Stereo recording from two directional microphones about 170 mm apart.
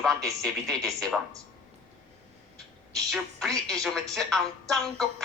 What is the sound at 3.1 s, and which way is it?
A woman's voice, centre (ahead or behind).